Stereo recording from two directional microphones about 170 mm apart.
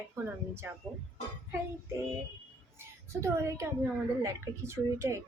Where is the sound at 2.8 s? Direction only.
15° right (ahead or behind).